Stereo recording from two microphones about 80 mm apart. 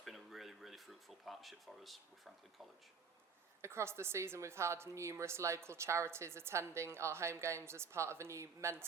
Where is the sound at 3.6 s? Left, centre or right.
Right.